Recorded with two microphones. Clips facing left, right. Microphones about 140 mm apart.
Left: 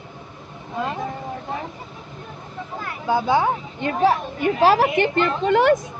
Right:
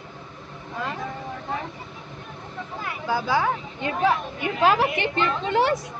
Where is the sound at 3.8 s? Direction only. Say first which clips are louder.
Left 4 dB; 35° left (ahead or behind); by 5.8 s 50° left (ahead or behind).